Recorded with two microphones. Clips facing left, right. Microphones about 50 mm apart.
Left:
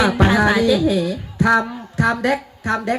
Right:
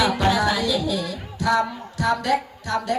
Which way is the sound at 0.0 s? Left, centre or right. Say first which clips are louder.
Left 4 dB; left.